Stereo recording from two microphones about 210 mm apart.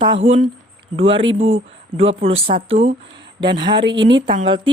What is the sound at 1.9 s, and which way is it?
Speech, 30° right (ahead or behind).